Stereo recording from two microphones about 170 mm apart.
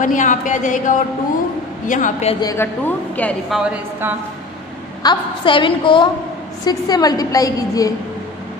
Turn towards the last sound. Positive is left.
turn(degrees=20)  # may be behind; listen again after turning